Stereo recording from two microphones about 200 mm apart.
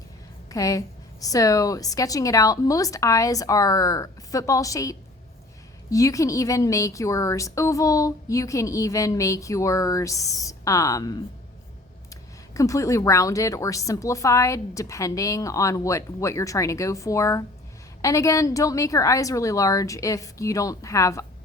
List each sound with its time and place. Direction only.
0.5 s a woman's voice: 15° left (ahead or behind)
12.5 s a woman's voice: 15° left (ahead or behind)